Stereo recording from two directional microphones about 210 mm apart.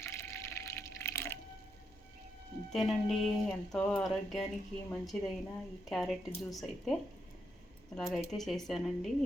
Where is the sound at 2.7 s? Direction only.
Centre (ahead or behind).